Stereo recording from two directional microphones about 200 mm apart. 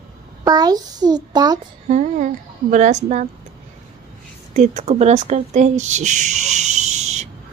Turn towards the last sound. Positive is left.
turn(degrees=-35)  # may be behind; listen again after turning